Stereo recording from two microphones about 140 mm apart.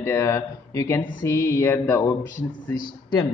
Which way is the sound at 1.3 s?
20° left (ahead or behind).